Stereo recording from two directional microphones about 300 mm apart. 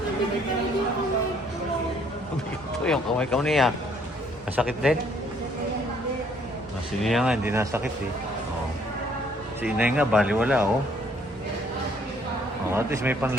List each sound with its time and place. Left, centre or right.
2.8 s speech: centre
7.0 s speech: centre
9.6 s speech: centre
12.7 s speech: centre